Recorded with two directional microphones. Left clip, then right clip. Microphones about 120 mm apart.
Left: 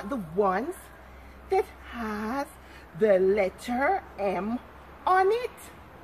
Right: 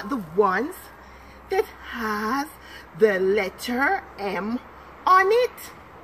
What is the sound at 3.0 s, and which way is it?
Speech, 15° left (ahead or behind).